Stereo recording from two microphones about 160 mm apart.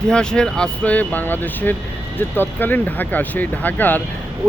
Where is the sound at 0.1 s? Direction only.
5° left (ahead or behind).